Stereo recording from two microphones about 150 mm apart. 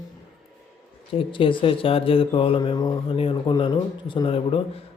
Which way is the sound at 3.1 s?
35° left (ahead or behind).